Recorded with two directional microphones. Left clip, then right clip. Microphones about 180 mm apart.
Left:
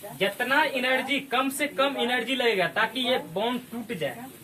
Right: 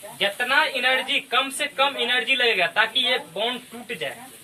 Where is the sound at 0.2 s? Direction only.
20° right (ahead or behind).